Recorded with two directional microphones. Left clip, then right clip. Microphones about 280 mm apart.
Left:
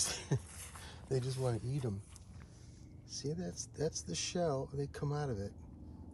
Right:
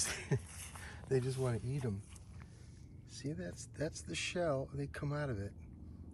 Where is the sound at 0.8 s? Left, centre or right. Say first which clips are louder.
Right 3 dB; centre.